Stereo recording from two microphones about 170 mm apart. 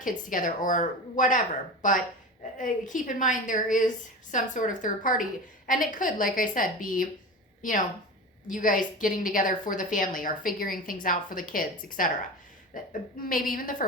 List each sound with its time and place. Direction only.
0.0 s a woman's voice: 50° left (ahead or behind)